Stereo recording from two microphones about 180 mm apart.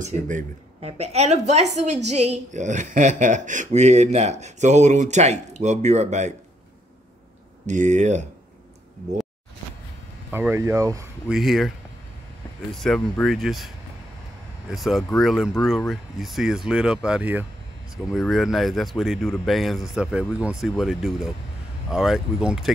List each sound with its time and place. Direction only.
0.0 s a woman's voice: 45° right (ahead or behind)
7.6 s a woman's voice: 45° right (ahead or behind)
10.3 s speech: 15° right (ahead or behind)
11.2 s speech: centre (ahead or behind)
12.7 s speech: 5° left (ahead or behind)
14.7 s speech: centre (ahead or behind)